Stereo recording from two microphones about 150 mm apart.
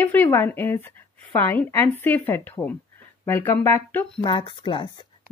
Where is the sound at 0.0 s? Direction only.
15° left (ahead or behind).